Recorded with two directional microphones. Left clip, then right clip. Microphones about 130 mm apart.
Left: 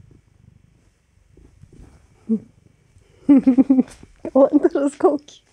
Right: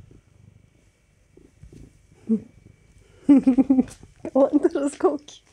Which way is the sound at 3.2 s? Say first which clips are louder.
Left 3 dB; 5° right (ahead or behind).